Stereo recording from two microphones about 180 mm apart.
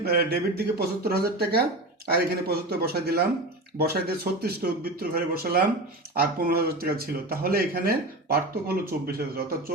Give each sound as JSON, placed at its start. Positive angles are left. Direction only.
{"t": 0.0, "sound": "speech", "side_deg": -60}